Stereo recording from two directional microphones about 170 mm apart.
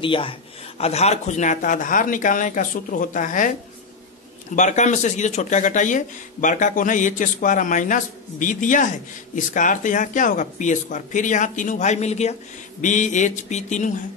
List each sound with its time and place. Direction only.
0.0 s speech: 30° left (ahead or behind); by 3.5 s 50° left (ahead or behind)
4.6 s speech: 45° left (ahead or behind)